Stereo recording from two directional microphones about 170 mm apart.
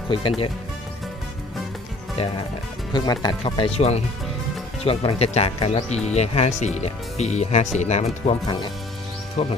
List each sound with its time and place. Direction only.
0.1 s speech: 30° left (ahead or behind)
2.9 s speech: 25° left (ahead or behind); by 8.4 s 40° left (ahead or behind)
9.4 s speech: 40° left (ahead or behind)